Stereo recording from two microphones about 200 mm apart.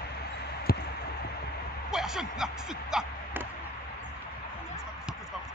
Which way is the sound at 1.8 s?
Centre (ahead or behind).